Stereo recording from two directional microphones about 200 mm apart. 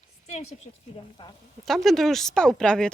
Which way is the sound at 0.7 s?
30° left (ahead or behind).